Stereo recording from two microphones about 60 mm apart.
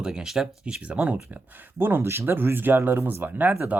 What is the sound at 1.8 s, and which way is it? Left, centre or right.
Speech, right.